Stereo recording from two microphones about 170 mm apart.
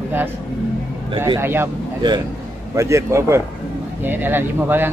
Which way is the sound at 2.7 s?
15° right (ahead or behind).